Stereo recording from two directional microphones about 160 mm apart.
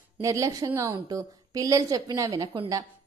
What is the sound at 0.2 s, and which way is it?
A woman's voice, 20° right (ahead or behind).